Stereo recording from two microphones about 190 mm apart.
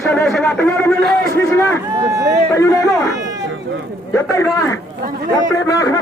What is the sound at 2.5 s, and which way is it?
Speech, 15° left (ahead or behind).